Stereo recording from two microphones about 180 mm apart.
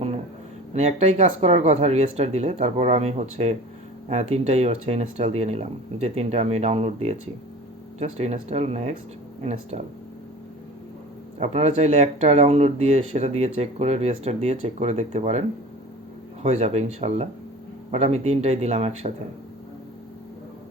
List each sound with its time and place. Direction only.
0.7 s speech: 35° right (ahead or behind)
11.3 s speech: 35° right (ahead or behind)